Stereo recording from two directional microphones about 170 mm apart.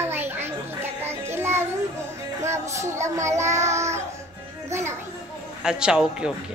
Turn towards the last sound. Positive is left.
turn(degrees=-5)  # may be behind; listen again after turning